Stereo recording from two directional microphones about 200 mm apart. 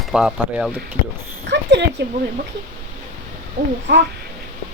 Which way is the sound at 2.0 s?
55° right (ahead or behind).